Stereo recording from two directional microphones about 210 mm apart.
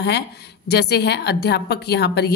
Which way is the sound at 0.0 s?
50° left (ahead or behind).